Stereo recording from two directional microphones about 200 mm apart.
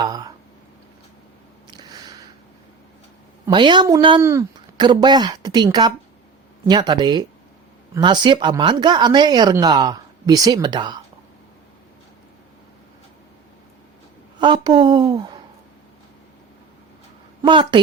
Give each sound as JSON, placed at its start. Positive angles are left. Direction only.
{"t": 0.0, "sound": "speech", "side_deg": -20}
{"t": 1.7, "sound": "a sound", "side_deg": -20}
{"t": 3.4, "sound": "speech", "side_deg": -25}
{"t": 14.3, "sound": "speech", "side_deg": -25}
{"t": 17.4, "sound": "speech", "side_deg": -25}